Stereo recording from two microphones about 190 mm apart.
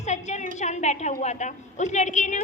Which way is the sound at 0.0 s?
35° left (ahead or behind).